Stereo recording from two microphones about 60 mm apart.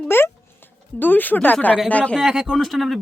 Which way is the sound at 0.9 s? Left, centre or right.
Left.